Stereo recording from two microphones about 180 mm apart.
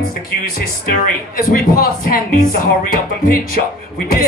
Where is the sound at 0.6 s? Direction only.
55° left (ahead or behind).